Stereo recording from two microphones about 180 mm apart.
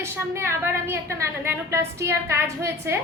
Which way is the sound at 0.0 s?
15° right (ahead or behind).